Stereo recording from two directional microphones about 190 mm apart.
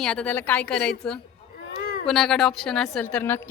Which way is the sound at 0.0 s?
5° left (ahead or behind).